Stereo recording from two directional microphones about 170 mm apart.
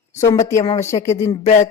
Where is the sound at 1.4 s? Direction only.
45° left (ahead or behind).